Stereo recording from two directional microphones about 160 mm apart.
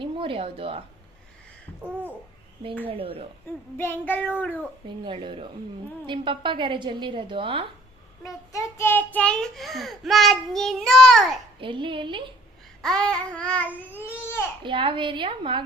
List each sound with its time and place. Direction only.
0.0 s speech: 35° right (ahead or behind)
1.9 s babbling: 10° right (ahead or behind)
2.8 s a woman's voice: 35° right (ahead or behind)
3.8 s babbling: 15° left (ahead or behind)
5.0 s a woman's voice: 30° right (ahead or behind)
8.5 s child singing: 15° left (ahead or behind)
11.6 s a woman's voice: 30° right (ahead or behind)
12.8 s babbling: 5° left (ahead or behind)
14.6 s a woman's voice: 30° right (ahead or behind)